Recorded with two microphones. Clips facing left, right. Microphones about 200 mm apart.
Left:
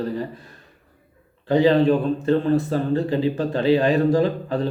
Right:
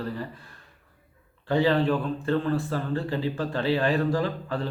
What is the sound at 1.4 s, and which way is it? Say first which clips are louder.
A man's voice: left 6 dB; 20° left (ahead or behind).